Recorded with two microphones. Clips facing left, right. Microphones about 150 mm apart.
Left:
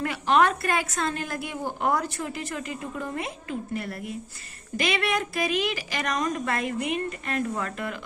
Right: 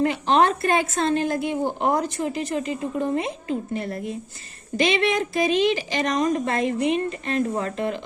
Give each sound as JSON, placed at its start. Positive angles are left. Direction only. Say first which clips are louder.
{"t": 0.0, "sound": "a woman's voice", "louder": "right 3 dB", "side_deg": -25}